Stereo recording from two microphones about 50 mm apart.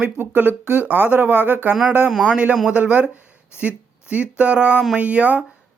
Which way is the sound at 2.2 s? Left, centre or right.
Right.